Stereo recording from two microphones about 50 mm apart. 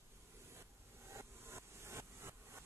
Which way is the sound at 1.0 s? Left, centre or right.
Right.